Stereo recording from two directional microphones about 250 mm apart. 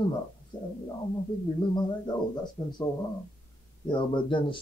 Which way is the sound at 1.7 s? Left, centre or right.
Centre.